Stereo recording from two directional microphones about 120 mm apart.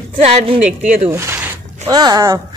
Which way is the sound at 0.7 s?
70° right (ahead or behind).